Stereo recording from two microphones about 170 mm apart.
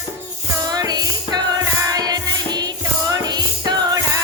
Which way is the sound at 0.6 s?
25° right (ahead or behind).